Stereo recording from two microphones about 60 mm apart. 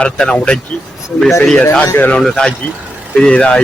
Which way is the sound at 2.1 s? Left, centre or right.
Centre.